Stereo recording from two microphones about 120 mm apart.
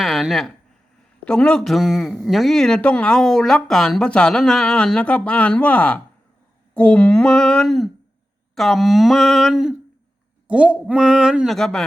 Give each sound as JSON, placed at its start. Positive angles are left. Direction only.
{"t": 0.0, "sound": "a man's voice", "side_deg": 0}